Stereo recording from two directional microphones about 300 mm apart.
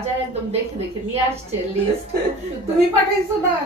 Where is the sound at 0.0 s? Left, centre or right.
Right.